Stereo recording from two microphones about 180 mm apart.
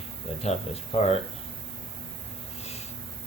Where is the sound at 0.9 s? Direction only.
35° left (ahead or behind).